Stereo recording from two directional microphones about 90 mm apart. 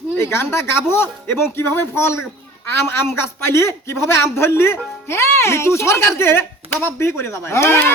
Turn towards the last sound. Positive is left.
turn(degrees=25)  # may be behind; listen again after turning